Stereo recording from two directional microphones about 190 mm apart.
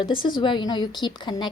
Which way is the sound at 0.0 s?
25° left (ahead or behind).